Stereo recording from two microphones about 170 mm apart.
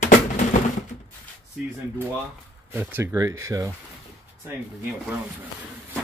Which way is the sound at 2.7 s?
10° right (ahead or behind).